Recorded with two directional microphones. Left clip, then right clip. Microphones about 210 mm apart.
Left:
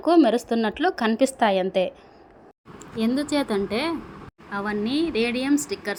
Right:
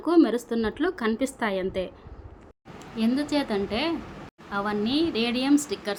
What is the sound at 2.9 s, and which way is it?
A woman's voice, 10° left (ahead or behind).